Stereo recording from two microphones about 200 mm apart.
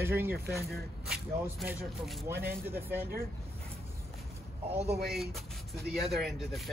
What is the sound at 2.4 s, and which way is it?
Speech, 10° right (ahead or behind).